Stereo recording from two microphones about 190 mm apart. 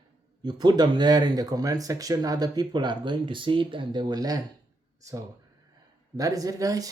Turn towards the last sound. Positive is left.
turn(degrees=-20)  # may be behind; listen again after turning